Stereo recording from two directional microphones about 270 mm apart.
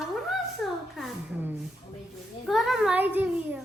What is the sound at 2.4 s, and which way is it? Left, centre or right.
Child singing, centre.